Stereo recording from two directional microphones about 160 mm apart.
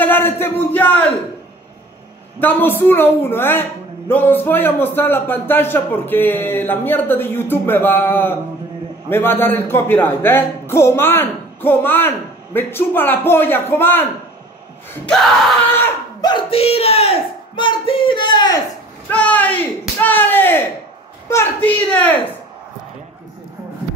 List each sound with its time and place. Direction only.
0.0 s speech: 10° left (ahead or behind)
2.4 s speech: 15° left (ahead or behind)
16.2 s speech: 30° left (ahead or behind)
19.0 s speech: 10° left (ahead or behind)